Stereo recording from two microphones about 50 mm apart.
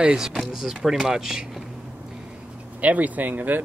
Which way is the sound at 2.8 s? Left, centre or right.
Right.